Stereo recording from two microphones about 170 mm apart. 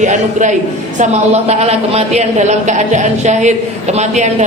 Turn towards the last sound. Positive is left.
turn(degrees=-45)  # may be behind; listen again after turning